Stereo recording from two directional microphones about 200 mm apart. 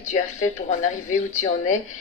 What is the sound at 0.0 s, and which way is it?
A woman's voice, 35° left (ahead or behind).